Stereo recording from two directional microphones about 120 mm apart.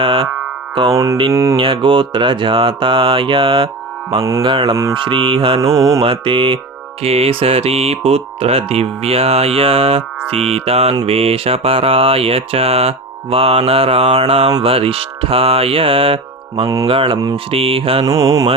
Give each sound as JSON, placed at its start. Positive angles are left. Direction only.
{"t": 0.0, "sound": "music", "side_deg": -45}
{"t": 0.9, "sound": "mantra", "side_deg": -25}
{"t": 1.5, "sound": "mantra", "side_deg": -45}
{"t": 4.2, "sound": "mantra", "side_deg": -25}
{"t": 4.4, "sound": "mantra", "side_deg": -45}
{"t": 5.7, "sound": "mantra", "side_deg": -25}
{"t": 6.0, "sound": "mantra", "side_deg": -45}
{"t": 7.0, "sound": "music", "side_deg": -55}
{"t": 11.0, "sound": "mantra", "side_deg": -55}